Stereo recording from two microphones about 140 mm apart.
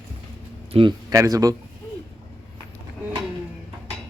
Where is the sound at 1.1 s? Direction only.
25° right (ahead or behind).